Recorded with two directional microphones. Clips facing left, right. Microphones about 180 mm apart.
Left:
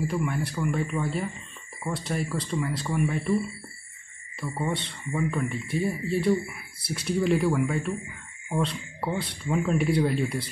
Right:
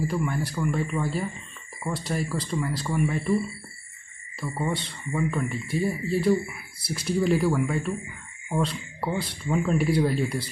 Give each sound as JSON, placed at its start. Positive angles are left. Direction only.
{"t": 0.0, "sound": "speech", "side_deg": 0}
{"t": 4.4, "sound": "speech", "side_deg": 0}